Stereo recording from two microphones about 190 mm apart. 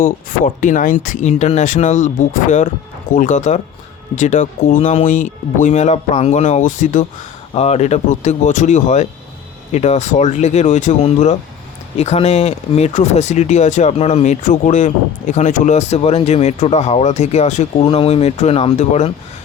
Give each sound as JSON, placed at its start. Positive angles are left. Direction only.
{"t": 0.0, "sound": "speech", "side_deg": 45}